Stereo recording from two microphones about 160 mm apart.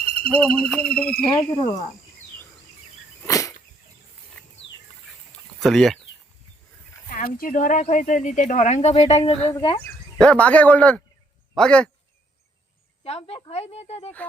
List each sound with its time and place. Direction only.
0.3 s a man's voice: 5° left (ahead or behind)
1.3 s frog: 25° left (ahead or behind)
3.2 s a sound: 20° left (ahead or behind)
5.5 s speech: centre (ahead or behind)
7.1 s speech: 60° left (ahead or behind); by 9.8 s 30° left (ahead or behind)
10.2 s a man's voice: 5° left (ahead or behind)
13.1 s speech: 40° left (ahead or behind)